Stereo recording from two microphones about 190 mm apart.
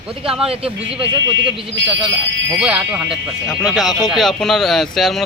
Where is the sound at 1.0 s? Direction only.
30° right (ahead or behind).